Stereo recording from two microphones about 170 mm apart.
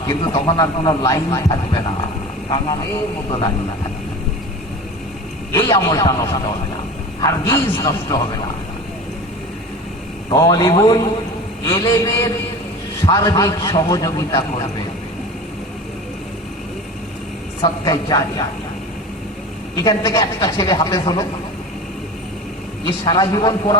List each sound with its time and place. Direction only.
0.1 s a man's voice: 30° left (ahead or behind)
5.5 s a man's voice: 15° left (ahead or behind)
7.5 s a man's voice: 20° left (ahead or behind)
10.2 s a man's voice: 25° left (ahead or behind)
17.6 s a man's voice: 25° left (ahead or behind)
19.7 s a man's voice: 20° left (ahead or behind)
22.9 s a man's voice: 25° left (ahead or behind)